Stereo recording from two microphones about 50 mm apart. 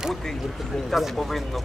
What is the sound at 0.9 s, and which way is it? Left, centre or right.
Speech, centre.